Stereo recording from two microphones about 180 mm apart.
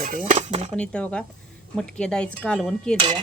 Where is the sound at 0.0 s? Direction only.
45° right (ahead or behind).